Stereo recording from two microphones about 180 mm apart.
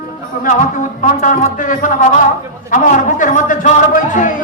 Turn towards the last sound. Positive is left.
turn(degrees=45)  # may be behind; listen again after turning